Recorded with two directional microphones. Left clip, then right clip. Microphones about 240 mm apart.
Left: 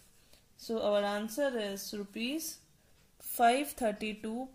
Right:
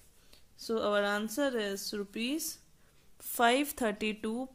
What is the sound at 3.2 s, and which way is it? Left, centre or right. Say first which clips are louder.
Speech: even; right.